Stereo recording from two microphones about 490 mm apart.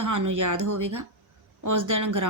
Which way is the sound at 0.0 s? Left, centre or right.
Right.